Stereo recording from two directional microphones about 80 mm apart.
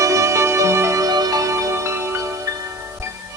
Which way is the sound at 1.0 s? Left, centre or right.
Right.